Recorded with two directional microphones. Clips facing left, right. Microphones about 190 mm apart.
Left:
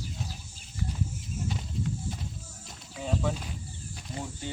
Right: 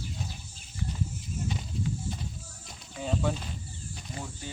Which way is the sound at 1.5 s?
Centre (ahead or behind).